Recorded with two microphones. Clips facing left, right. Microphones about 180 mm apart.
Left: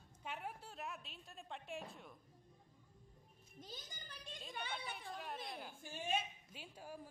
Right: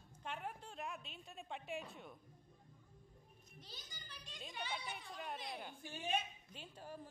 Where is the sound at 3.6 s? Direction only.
50° left (ahead or behind).